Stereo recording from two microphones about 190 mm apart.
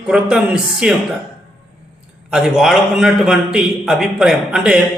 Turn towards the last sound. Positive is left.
turn(degrees=-5)  # may be behind; listen again after turning